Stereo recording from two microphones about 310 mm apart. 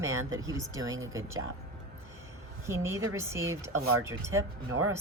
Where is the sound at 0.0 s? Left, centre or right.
Centre.